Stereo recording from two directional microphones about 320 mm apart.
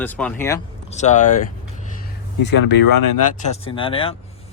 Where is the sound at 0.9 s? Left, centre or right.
Left.